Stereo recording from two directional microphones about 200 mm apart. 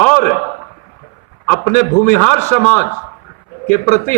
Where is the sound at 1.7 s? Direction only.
40° left (ahead or behind).